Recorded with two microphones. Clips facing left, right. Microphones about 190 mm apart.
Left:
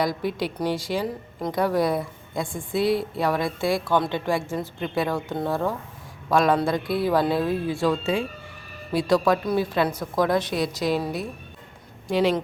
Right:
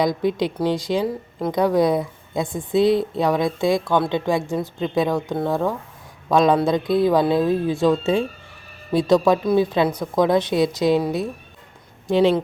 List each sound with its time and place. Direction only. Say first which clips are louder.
0.0 s a woman's voice: right 5 dB; 20° right (ahead or behind)
10.6 s a woman's voice: right 6 dB; centre (ahead or behind)
11.0 s speech: right 6 dB; 20° right (ahead or behind)